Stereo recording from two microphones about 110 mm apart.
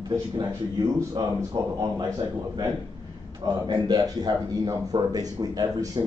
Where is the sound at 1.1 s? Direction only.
40° right (ahead or behind).